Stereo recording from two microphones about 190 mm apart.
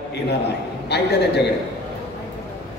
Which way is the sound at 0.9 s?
60° left (ahead or behind).